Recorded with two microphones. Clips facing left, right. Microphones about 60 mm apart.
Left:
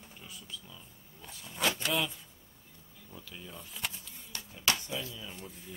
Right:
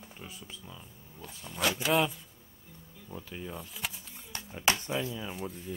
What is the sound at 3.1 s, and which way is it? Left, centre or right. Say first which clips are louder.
Speech: right 7 dB; right.